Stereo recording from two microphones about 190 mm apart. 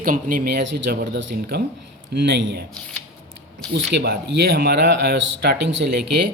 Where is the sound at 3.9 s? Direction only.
65° right (ahead or behind).